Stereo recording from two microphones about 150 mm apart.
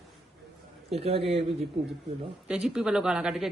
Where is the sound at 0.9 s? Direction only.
40° right (ahead or behind).